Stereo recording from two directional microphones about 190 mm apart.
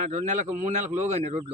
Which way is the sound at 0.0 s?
40° right (ahead or behind).